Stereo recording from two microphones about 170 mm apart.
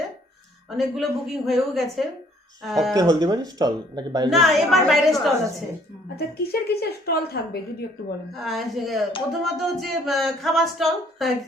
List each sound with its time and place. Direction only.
0.8 s speech: centre (ahead or behind)
2.9 s speech: 20° right (ahead or behind)
4.3 s speech: centre (ahead or behind)
6.1 s a woman's voice: 70° left (ahead or behind)
8.3 s speech: centre (ahead or behind)